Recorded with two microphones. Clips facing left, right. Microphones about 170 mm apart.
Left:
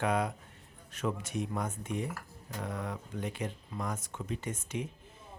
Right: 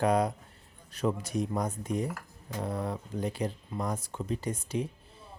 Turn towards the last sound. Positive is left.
turn(degrees=-35)  # may be behind; listen again after turning